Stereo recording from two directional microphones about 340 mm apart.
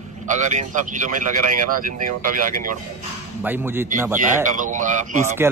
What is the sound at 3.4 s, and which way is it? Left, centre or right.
Speech, centre.